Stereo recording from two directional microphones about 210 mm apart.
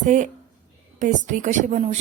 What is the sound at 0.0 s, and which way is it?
A woman's voice, 40° right (ahead or behind).